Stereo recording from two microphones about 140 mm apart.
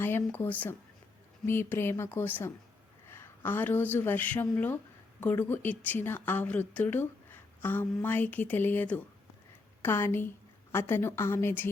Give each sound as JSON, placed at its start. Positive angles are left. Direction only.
{"t": 0.0, "sound": "a woman's voice", "side_deg": 15}